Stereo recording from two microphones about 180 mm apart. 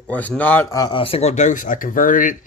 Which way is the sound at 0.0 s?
10° left (ahead or behind).